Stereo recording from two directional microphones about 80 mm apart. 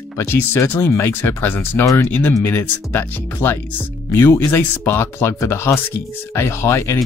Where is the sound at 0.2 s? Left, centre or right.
Left.